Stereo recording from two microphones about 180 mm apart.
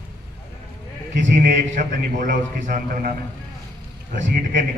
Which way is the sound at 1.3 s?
45° right (ahead or behind).